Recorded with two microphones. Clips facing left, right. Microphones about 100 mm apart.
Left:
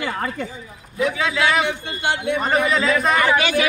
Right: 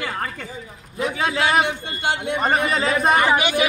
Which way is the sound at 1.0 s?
40° right (ahead or behind).